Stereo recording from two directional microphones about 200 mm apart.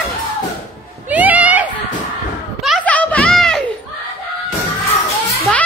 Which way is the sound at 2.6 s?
5° left (ahead or behind).